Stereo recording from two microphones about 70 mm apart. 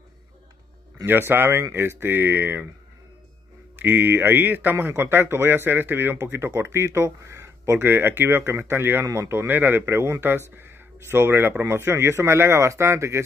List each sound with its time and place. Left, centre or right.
1.0 s speech: right
3.7 s speech: right
9.5 s speech: right